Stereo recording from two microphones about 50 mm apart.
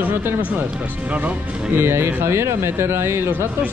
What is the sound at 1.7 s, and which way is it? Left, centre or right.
Speech, right.